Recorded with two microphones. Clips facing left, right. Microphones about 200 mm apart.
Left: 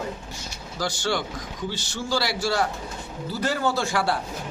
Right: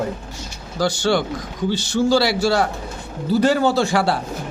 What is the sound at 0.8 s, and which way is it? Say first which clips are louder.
Speech: right 8 dB; 70° right (ahead or behind).